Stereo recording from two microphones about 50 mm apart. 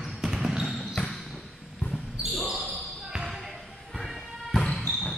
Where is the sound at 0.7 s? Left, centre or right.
Centre.